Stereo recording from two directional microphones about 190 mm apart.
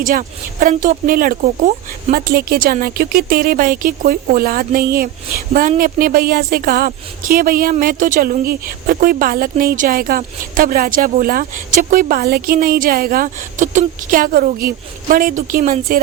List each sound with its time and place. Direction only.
0.0 s a woman's voice: 45° right (ahead or behind)